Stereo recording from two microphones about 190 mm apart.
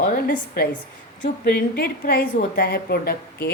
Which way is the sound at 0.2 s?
55° left (ahead or behind).